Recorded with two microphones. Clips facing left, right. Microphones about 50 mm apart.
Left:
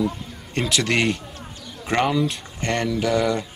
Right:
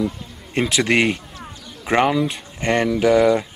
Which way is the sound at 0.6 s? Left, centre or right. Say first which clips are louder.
Right 4 dB; centre.